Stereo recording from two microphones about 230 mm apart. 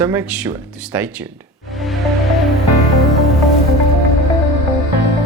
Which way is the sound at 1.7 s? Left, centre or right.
Centre.